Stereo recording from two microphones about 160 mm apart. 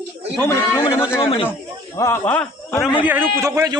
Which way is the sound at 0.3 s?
15° left (ahead or behind).